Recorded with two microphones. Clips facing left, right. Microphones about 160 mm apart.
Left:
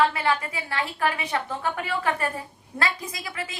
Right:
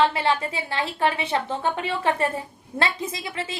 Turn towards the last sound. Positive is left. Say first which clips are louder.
# right 4 dB
turn(degrees=-25)  # may be behind; listen again after turning